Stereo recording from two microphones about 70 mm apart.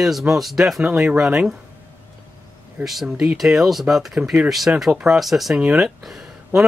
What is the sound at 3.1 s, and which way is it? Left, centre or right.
Speech, centre.